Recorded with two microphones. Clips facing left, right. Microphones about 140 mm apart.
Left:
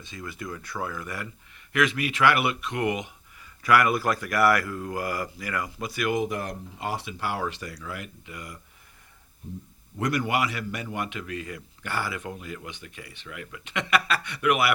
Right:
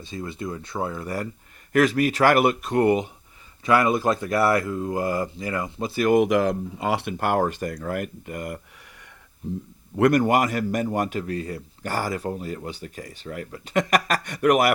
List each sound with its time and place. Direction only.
0.0 s speech: 30° right (ahead or behind)
3.6 s speech: 25° right (ahead or behind)
6.1 s speech: 90° right
6.9 s speech: 55° right (ahead or behind)
10.0 s speech: 45° right (ahead or behind)